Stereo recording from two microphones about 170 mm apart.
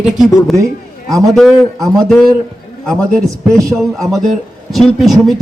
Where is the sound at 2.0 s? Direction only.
Centre (ahead or behind).